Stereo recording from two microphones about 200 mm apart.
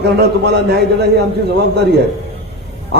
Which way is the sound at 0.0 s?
55° right (ahead or behind).